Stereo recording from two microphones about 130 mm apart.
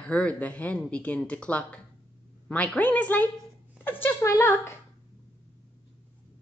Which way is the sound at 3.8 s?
15° left (ahead or behind).